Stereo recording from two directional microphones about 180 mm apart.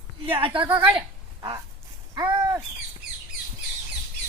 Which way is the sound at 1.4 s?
20° right (ahead or behind).